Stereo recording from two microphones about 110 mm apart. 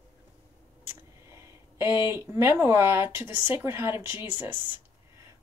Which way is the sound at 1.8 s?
25° right (ahead or behind).